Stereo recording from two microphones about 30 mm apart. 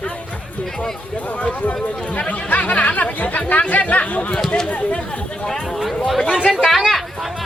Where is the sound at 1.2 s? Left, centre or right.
Left.